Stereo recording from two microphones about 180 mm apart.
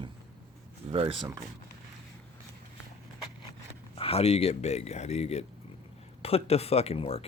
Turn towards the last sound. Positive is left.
turn(degrees=35)  # may be behind; listen again after turning